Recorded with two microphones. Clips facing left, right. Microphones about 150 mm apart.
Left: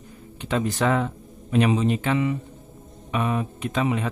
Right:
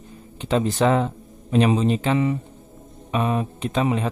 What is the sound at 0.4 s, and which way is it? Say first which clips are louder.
Speech: right 4 dB; 30° right (ahead or behind).